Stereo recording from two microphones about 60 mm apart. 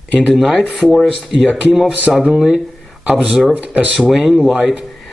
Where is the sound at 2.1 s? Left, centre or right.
Centre.